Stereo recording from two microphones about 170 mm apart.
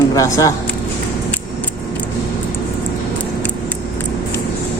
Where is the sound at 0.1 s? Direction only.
20° left (ahead or behind).